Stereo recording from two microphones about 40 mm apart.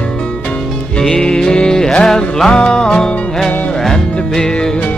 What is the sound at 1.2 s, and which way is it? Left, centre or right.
Music, centre.